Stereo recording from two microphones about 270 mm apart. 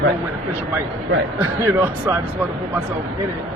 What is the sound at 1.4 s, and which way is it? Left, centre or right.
Speech, centre.